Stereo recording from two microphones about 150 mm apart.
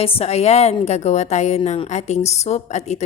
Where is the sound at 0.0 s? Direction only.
45° left (ahead or behind).